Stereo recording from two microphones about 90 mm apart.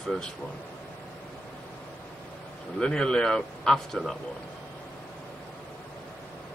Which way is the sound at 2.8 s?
10° left (ahead or behind).